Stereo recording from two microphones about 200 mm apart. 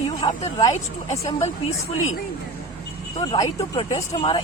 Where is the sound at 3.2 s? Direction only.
20° left (ahead or behind).